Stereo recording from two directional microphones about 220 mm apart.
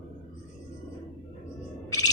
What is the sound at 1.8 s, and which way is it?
Music, 15° left (ahead or behind).